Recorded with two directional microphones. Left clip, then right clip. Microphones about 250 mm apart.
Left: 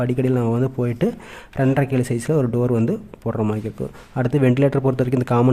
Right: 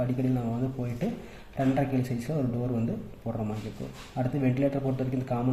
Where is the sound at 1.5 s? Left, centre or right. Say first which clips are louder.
Left 8 dB; left.